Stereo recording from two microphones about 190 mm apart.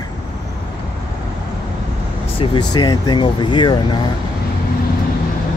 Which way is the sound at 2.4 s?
20° left (ahead or behind).